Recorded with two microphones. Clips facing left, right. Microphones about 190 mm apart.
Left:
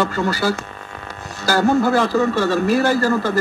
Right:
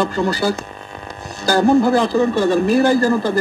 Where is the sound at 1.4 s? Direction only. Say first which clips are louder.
Right 3 dB; 15° right (ahead or behind).